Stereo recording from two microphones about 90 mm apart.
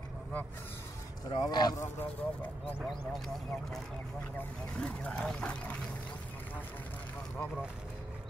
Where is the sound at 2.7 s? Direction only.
Centre (ahead or behind).